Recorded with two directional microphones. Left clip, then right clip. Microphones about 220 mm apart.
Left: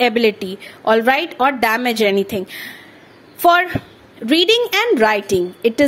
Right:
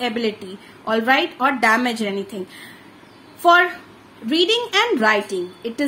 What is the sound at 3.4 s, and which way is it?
A woman's voice, 35° left (ahead or behind).